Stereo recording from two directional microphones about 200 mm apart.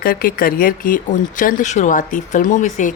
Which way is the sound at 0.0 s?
45° left (ahead or behind).